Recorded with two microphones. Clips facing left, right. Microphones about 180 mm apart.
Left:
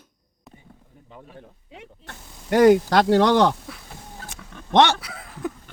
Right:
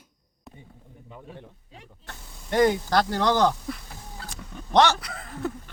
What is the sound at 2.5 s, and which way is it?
Speech, 80° left.